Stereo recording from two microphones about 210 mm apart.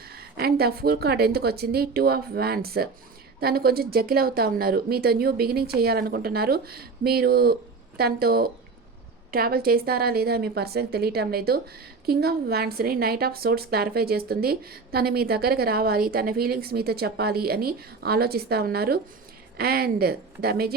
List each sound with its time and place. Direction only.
0.0 s a woman's voice: 45° right (ahead or behind)